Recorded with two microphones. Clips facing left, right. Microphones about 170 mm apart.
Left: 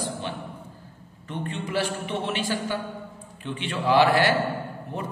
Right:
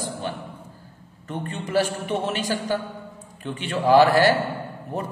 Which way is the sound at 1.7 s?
45° right (ahead or behind).